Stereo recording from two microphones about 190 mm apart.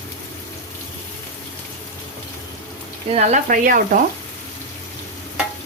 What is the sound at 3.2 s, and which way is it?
Speech, 40° right (ahead or behind).